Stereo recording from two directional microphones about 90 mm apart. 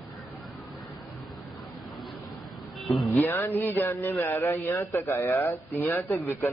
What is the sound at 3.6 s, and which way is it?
Speech, 20° left (ahead or behind).